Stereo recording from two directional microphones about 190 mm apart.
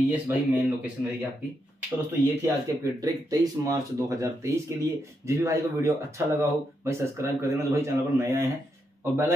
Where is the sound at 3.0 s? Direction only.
20° right (ahead or behind).